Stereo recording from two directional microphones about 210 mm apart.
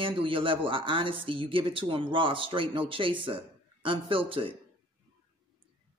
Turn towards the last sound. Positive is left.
turn(degrees=-25)  # may be behind; listen again after turning